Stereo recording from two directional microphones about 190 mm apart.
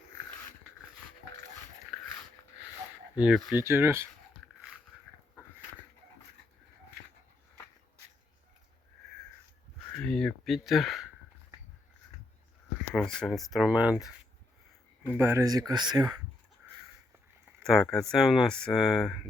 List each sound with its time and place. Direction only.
3.2 s speech: 5° right (ahead or behind)
3.6 s speech: 15° right (ahead or behind)
10.0 s a sound: 5° left (ahead or behind)
12.9 s speech: centre (ahead or behind)
15.0 s speech: 10° right (ahead or behind)
17.6 s speech: centre (ahead or behind)